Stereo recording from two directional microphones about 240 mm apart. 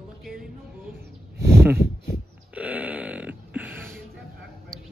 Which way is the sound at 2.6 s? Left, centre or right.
Centre.